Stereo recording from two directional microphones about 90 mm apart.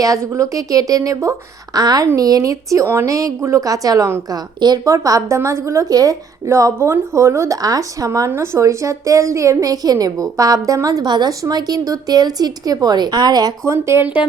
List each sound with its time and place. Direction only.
0.0 s a woman's voice: 35° right (ahead or behind)
11.0 s a woman's voice: 50° right (ahead or behind)
13.7 s speech: 30° right (ahead or behind)